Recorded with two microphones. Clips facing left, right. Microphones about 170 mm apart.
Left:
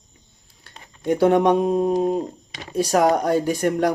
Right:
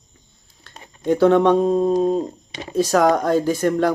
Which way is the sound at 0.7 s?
10° left (ahead or behind).